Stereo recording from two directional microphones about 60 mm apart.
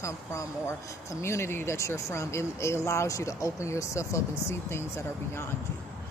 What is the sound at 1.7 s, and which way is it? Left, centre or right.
Speech, left.